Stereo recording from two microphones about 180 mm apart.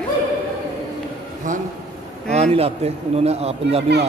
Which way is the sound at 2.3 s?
35° right (ahead or behind).